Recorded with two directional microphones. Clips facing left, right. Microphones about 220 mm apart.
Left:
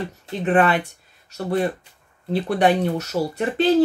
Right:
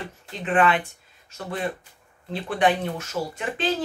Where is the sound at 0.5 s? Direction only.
40° left (ahead or behind).